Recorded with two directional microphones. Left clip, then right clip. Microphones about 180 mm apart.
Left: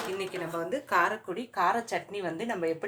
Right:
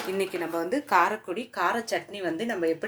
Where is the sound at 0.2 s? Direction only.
35° right (ahead or behind).